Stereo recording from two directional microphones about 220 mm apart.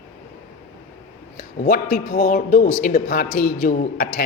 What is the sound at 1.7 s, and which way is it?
A man's voice, 40° left (ahead or behind).